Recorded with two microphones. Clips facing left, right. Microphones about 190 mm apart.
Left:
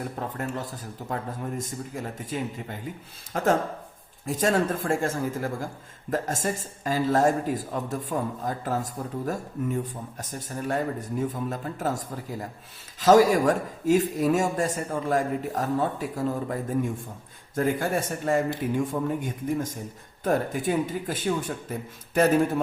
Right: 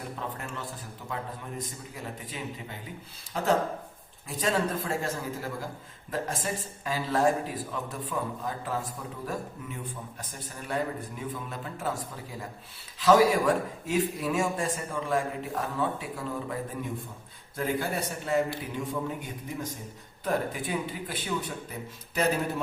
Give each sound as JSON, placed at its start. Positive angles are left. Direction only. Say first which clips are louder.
{"t": 0.2, "sound": "speech", "louder": "left 6 dB", "side_deg": 40}